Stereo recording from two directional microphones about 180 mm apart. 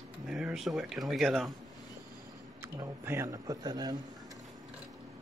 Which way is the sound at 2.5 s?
15° right (ahead or behind).